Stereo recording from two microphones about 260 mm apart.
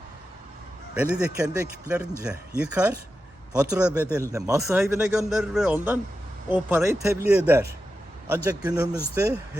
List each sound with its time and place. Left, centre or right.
0.9 s speech: centre